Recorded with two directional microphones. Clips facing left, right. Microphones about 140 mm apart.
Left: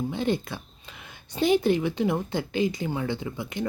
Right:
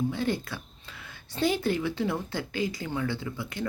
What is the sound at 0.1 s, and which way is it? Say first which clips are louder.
Speech: left 3 dB; 20° left (ahead or behind).